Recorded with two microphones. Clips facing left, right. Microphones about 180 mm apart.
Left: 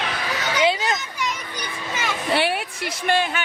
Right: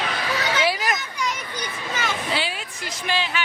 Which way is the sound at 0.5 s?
20° left (ahead or behind).